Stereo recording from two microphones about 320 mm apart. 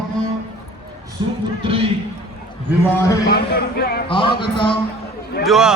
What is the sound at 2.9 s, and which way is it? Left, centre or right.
Speech, centre.